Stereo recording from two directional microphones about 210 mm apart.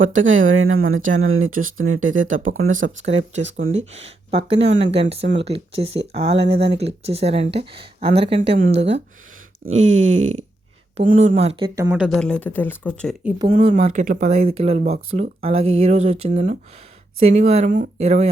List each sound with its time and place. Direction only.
0.0 s speech: 70° right (ahead or behind)
3.9 s speech: 30° right (ahead or behind)
8.4 s speech: 40° right (ahead or behind)
9.8 s speech: 70° right (ahead or behind)
10.9 s speech: 35° right (ahead or behind)
11.7 s speech: 15° right (ahead or behind)
11.9 s speech: centre (ahead or behind)
13.5 s speech: 30° right (ahead or behind)